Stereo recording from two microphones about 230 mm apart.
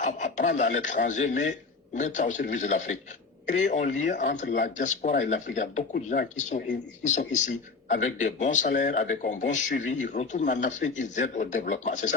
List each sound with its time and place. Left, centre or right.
0.0 s speech: left